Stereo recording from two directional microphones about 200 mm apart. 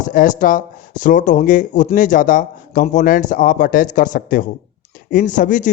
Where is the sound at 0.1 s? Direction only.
40° left (ahead or behind).